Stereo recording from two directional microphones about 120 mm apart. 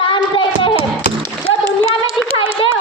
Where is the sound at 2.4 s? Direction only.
45° left (ahead or behind).